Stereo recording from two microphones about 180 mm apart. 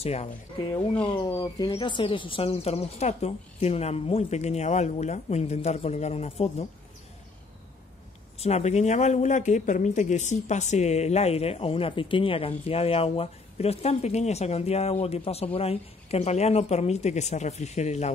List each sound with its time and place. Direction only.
0.0 s speech: 35° left (ahead or behind)
8.4 s speech: 35° left (ahead or behind)